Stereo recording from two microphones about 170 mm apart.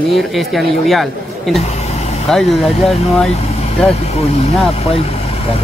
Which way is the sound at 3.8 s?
40° left (ahead or behind).